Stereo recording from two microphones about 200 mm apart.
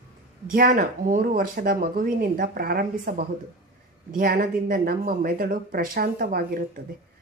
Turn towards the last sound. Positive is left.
turn(degrees=-45)  # may be behind; listen again after turning